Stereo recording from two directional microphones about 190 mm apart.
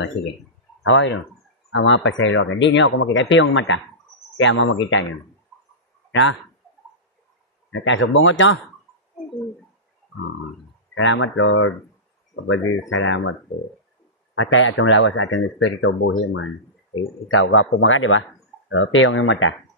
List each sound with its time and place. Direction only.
0.8 s speech: 80° left
7.7 s speech: 80° left
11.0 s speech: 80° left
14.3 s speech: 90° left